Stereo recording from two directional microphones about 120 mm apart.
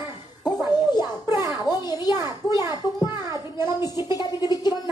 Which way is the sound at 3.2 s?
25° right (ahead or behind).